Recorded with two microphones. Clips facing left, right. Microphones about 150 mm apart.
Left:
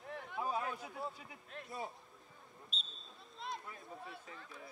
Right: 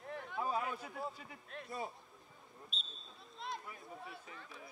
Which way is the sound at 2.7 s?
Centre (ahead or behind).